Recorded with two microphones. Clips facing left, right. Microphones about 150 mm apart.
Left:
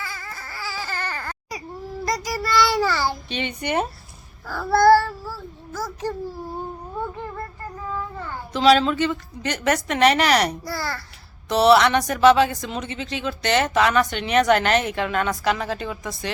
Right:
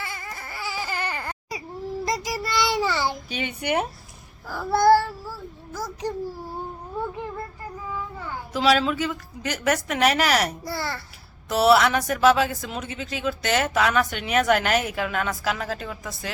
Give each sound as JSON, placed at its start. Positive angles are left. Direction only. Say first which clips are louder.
{"t": 0.0, "sound": "baby cry", "louder": "even", "side_deg": -20}
{"t": 2.0, "sound": "child singing", "louder": "left 5 dB", "side_deg": -25}
{"t": 3.2, "sound": "a woman's voice", "louder": "left 1 dB", "side_deg": -5}
{"t": 7.9, "sound": "speech", "louder": "left 3 dB", "side_deg": -10}
{"t": 10.7, "sound": "a child's voice", "louder": "left 1 dB", "side_deg": -25}
{"t": 11.4, "sound": "speech", "louder": "left 2 dB", "side_deg": -5}